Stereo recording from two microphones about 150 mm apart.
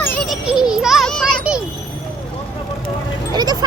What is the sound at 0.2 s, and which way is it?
Music, centre (ahead or behind).